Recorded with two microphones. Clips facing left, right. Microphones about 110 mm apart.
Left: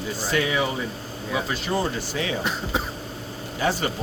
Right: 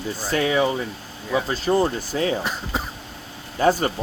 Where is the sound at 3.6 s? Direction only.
40° right (ahead or behind).